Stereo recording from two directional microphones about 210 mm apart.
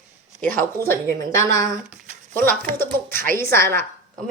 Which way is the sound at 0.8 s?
15° right (ahead or behind).